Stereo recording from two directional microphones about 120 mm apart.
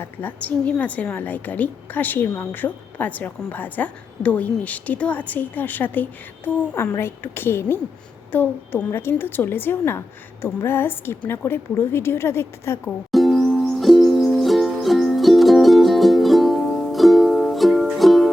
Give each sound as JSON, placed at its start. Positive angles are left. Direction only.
{"t": 0.0, "sound": "a woman's voice", "side_deg": 15}
{"t": 13.1, "sound": "music", "side_deg": 0}